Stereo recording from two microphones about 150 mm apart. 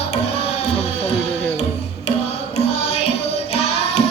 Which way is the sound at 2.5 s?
45° left (ahead or behind).